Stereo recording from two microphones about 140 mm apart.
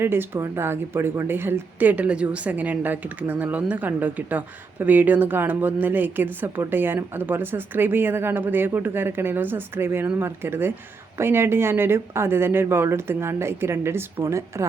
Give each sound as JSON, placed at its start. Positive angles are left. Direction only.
{"t": 0.0, "sound": "a woman's voice", "side_deg": -15}